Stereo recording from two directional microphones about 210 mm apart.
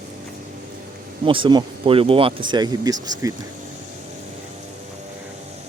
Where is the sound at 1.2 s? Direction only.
25° right (ahead or behind).